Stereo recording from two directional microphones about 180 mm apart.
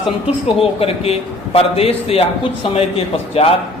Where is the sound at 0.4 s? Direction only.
30° left (ahead or behind).